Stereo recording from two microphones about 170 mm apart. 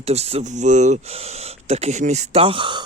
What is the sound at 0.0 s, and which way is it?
Speech, 40° right (ahead or behind).